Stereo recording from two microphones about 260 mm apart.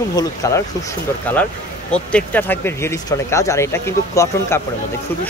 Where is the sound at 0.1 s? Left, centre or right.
Centre.